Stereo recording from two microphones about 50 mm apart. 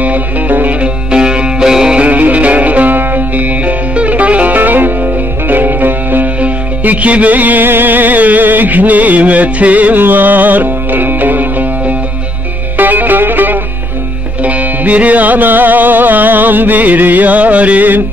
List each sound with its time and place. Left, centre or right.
0.0 s music: right
1.1 s music: centre
2.0 s music: right